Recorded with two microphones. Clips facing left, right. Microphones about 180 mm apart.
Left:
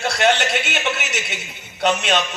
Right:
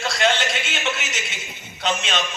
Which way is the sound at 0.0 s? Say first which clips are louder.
Left 3 dB; 65° left (ahead or behind).